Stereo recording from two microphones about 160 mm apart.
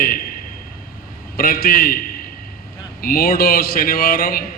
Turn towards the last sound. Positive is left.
turn(degrees=65)  # may be behind; listen again after turning